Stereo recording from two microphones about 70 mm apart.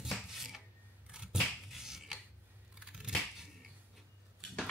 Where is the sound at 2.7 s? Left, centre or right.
Centre.